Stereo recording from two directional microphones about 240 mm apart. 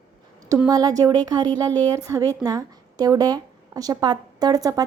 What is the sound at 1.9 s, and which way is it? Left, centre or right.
A woman's voice, centre.